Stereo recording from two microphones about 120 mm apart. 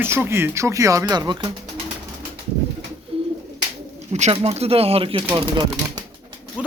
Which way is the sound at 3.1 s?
50° right (ahead or behind).